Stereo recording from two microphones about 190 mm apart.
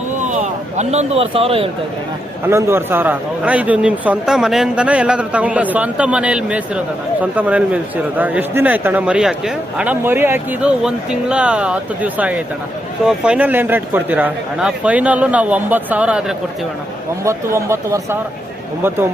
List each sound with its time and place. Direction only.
0.2 s speech: 40° right (ahead or behind)
2.5 s a man's voice: 10° right (ahead or behind)